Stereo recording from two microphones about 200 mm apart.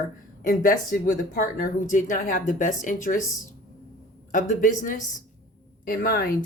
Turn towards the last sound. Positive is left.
turn(degrees=45)  # may be behind; listen again after turning